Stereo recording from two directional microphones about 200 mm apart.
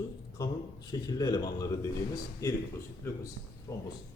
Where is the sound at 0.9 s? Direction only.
20° left (ahead or behind).